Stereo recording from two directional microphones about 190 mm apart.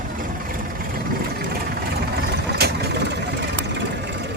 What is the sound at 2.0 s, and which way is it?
Vehicle, 55° right (ahead or behind).